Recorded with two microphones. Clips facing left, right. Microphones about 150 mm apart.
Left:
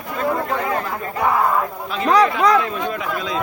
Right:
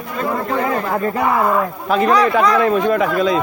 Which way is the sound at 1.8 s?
50° right (ahead or behind).